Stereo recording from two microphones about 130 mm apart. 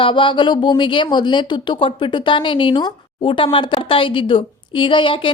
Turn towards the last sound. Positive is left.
turn(degrees=40)  # may be behind; listen again after turning